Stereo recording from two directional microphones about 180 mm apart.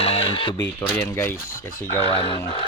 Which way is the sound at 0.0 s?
35° left (ahead or behind).